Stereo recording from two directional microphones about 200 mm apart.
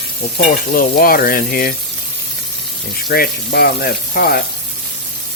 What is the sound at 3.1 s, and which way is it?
Speech, 50° left (ahead or behind).